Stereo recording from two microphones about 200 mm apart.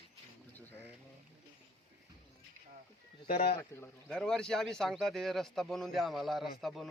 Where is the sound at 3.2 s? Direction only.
50° left (ahead or behind).